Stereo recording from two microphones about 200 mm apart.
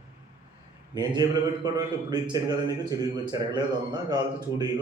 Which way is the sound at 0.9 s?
20° right (ahead or behind).